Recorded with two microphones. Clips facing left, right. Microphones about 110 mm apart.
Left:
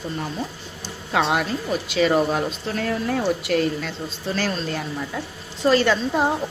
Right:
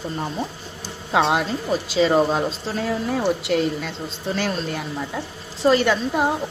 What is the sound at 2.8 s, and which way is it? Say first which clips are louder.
A woman's voice: right 1 dB; 10° right (ahead or behind).